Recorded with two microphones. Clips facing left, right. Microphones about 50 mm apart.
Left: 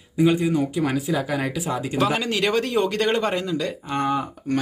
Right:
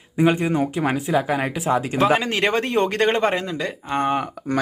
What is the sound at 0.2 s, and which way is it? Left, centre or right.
Speech, right.